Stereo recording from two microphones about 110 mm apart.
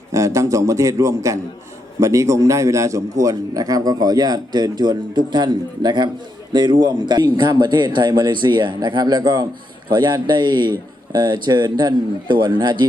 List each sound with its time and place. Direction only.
0.1 s a man's voice: 30° right (ahead or behind)